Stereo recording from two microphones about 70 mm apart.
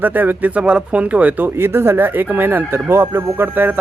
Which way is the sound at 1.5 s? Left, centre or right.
Right.